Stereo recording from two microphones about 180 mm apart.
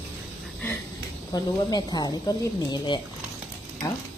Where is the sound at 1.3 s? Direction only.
20° left (ahead or behind).